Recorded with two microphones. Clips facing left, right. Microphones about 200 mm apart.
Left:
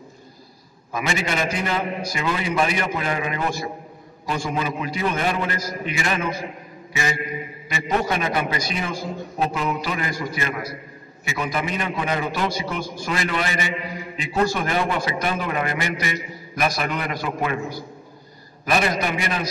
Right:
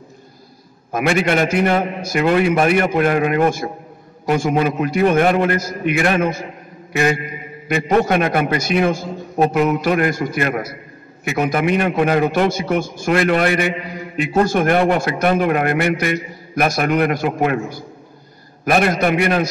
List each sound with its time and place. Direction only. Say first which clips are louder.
0.9 s a man's voice: right 8 dB; 60° right (ahead or behind)
6.9 s a sound: right 9 dB; 60° right (ahead or behind)
7.6 s a man's voice: right 8 dB; 50° right (ahead or behind)
18.7 s a man's voice: right 6 dB; 55° right (ahead or behind)